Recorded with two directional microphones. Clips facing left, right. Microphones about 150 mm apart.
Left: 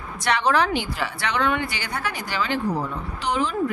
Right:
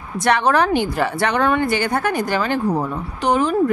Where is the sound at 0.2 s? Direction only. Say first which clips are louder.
Right 4 dB; 50° right (ahead or behind).